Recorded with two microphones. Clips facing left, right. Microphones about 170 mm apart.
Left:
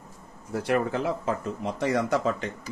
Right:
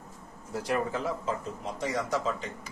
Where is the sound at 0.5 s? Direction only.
60° left (ahead or behind).